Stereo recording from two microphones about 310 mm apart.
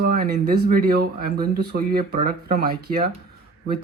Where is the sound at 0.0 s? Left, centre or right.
Right.